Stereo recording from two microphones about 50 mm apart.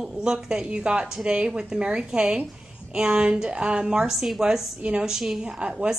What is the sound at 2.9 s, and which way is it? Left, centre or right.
A woman's voice, centre.